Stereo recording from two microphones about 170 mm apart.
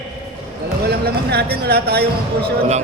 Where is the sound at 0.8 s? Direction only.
70° right (ahead or behind).